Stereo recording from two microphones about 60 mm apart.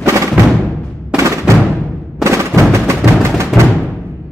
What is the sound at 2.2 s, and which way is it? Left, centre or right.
Music, right.